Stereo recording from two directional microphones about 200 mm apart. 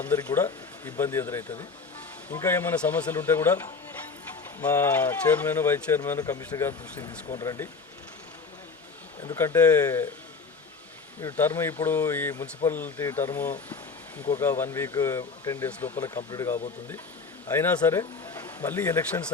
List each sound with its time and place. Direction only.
0.0 s speech: 15° left (ahead or behind)
4.6 s speech: 10° left (ahead or behind)
9.2 s speech: 15° left (ahead or behind)
11.2 s speech: 15° left (ahead or behind)